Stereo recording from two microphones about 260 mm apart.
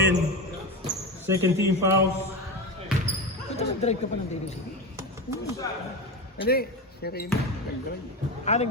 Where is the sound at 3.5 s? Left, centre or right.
Left.